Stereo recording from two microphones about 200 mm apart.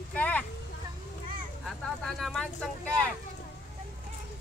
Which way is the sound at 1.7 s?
Centre (ahead or behind).